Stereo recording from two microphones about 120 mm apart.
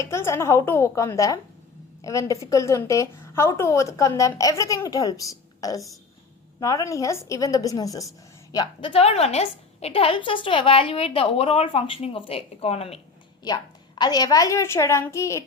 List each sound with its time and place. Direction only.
0.0 s a woman's voice: 25° left (ahead or behind)
8.5 s a woman's voice: 40° left (ahead or behind); by 13.0 s 55° left (ahead or behind)
14.0 s a woman's voice: 35° left (ahead or behind)